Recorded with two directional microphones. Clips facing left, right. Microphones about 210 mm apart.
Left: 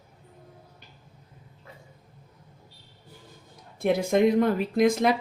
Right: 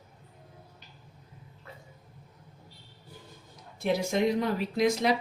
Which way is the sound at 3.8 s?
55° left (ahead or behind).